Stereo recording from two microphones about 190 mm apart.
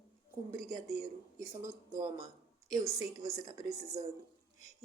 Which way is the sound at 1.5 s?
15° right (ahead or behind).